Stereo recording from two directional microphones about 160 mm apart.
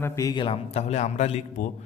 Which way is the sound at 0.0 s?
20° left (ahead or behind).